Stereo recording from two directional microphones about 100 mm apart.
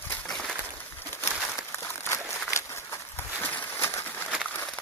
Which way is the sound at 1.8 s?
30° left (ahead or behind).